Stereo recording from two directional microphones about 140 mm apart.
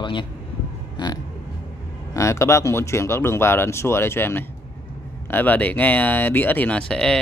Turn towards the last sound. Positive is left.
turn(degrees=5)  # may be behind; listen again after turning